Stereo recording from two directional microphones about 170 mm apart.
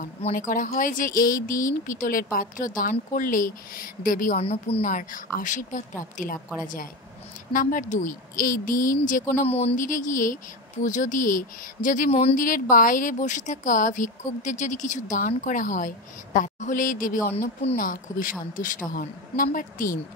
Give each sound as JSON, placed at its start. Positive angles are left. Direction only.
{"t": 0.3, "sound": "speech", "side_deg": 50}
{"t": 4.4, "sound": "a woman's voice", "side_deg": 35}
{"t": 4.8, "sound": "speech", "side_deg": 50}
{"t": 7.5, "sound": "speech", "side_deg": 50}
{"t": 9.4, "sound": "speech", "side_deg": 40}
{"t": 12.1, "sound": "a woman's voice", "side_deg": 35}
{"t": 12.4, "sound": "a woman's voice", "side_deg": 55}
{"t": 17.4, "sound": "a woman's voice", "side_deg": 40}
{"t": 17.7, "sound": "speech", "side_deg": 55}